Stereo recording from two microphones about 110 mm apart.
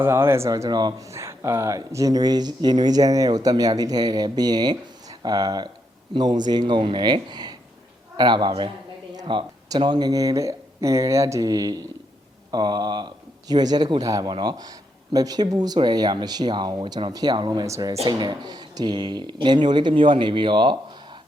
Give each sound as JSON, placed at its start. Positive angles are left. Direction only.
{"t": 0.0, "sound": "speech", "side_deg": -25}